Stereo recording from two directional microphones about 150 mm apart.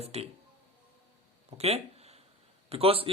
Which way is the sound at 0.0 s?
45° right (ahead or behind).